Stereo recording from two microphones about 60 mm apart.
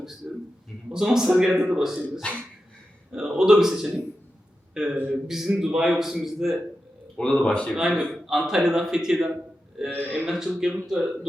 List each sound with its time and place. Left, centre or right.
0.2 s a sound: centre
0.9 s a man's voice: centre
7.2 s speech: centre
7.7 s speech: centre